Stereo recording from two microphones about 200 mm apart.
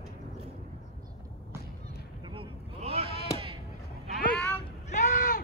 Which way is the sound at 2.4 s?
30° right (ahead or behind).